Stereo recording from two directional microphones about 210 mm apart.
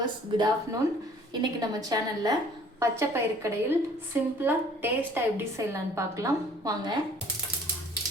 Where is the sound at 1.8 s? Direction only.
20° right (ahead or behind).